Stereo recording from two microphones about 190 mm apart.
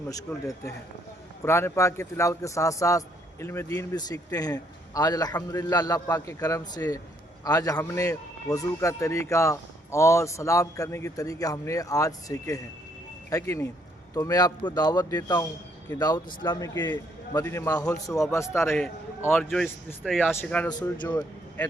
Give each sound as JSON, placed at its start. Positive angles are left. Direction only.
{"t": 0.1, "sound": "a man's voice", "side_deg": 15}
{"t": 20.7, "sound": "speech", "side_deg": 20}